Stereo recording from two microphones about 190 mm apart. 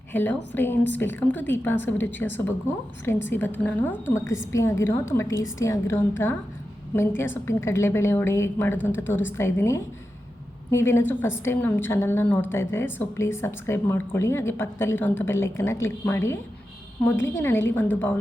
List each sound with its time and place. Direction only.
0.1 s a woman's voice: 10° left (ahead or behind)